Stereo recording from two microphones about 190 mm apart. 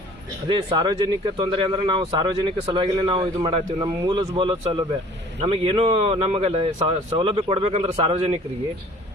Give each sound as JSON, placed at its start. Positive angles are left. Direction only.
{"t": 0.4, "sound": "speech", "side_deg": -25}